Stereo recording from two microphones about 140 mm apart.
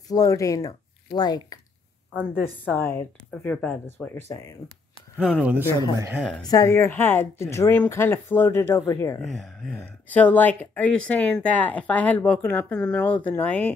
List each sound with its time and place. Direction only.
0.1 s speech: 25° left (ahead or behind)
2.6 s speech: 15° left (ahead or behind)
5.2 s speech: 5° right (ahead or behind)
5.8 s speech: 25° right (ahead or behind)
6.4 s speech: 25° left (ahead or behind)
9.2 s speech: centre (ahead or behind)
10.0 s speech: 10° left (ahead or behind)